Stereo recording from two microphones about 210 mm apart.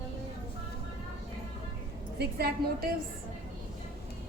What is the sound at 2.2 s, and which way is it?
Speech, 50° right (ahead or behind).